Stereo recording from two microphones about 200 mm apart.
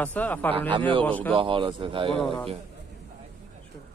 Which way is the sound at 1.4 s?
25° right (ahead or behind).